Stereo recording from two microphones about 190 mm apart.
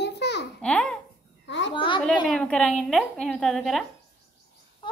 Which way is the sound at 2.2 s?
5° left (ahead or behind).